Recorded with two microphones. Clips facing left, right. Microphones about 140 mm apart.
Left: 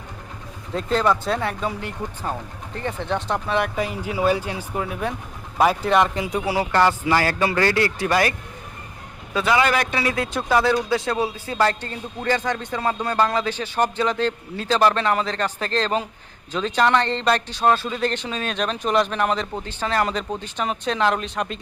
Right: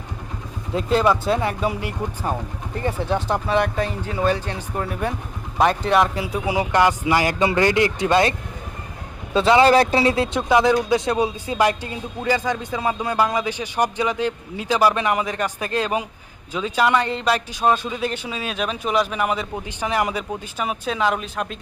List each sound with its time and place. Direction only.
0.7 s a man's voice: 10° right (ahead or behind)
3.8 s speech: 10° left (ahead or behind)
6.4 s a man's voice: 15° right (ahead or behind)
10.5 s a man's voice: 15° right (ahead or behind)